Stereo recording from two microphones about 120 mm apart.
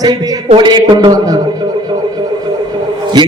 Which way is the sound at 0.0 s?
30° right (ahead or behind).